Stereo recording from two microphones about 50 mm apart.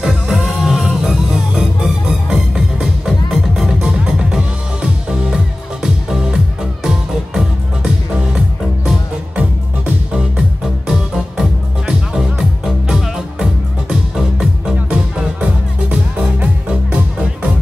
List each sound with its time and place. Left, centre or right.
0.0 s music: centre
3.8 s music: centre
10.9 s music: centre
14.9 s music: centre